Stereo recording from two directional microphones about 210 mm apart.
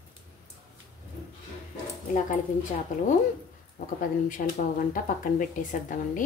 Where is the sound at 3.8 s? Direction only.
40° left (ahead or behind).